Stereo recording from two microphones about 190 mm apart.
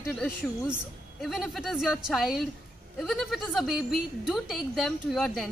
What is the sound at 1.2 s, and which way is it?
A woman's voice, centre (ahead or behind).